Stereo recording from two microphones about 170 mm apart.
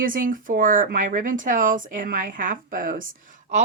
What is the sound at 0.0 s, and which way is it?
Speech, 55° right (ahead or behind).